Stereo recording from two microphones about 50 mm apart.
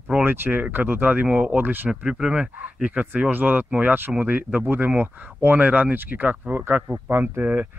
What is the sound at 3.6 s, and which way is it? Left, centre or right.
Speech, right.